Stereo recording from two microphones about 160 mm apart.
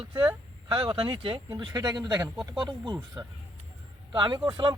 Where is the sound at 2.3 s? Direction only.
Centre (ahead or behind).